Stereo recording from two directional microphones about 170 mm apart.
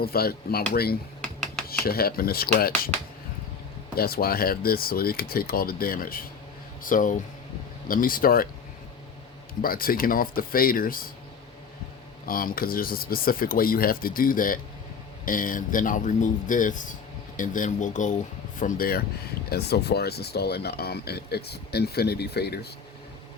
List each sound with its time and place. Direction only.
0.0 s speech: 65° left (ahead or behind)
1.2 s computer keyboard: 5° left (ahead or behind)
1.8 s speech: 65° left (ahead or behind)
3.9 s speech: 65° left (ahead or behind)
9.6 s speech: 55° left (ahead or behind)
12.3 s speech: 55° left (ahead or behind)
18.6 s speech: 60° left (ahead or behind)
19.5 s speech: 70° left (ahead or behind)